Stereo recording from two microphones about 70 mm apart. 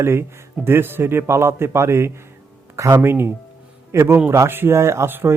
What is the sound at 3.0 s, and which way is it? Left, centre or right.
A man's voice, right.